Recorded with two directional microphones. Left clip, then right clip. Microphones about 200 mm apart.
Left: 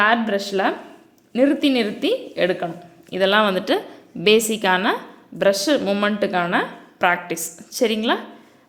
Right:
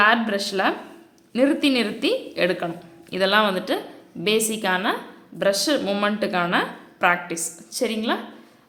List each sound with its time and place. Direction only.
0.0 s a woman's voice: 15° left (ahead or behind)